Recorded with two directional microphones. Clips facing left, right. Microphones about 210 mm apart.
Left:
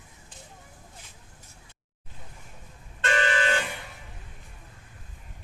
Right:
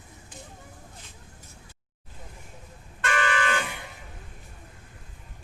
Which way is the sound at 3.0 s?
25° left (ahead or behind).